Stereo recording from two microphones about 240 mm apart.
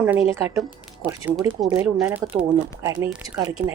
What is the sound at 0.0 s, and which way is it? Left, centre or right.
Speech, centre.